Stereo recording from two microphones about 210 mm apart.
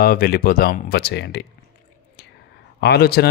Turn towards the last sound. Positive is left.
turn(degrees=50)  # may be behind; listen again after turning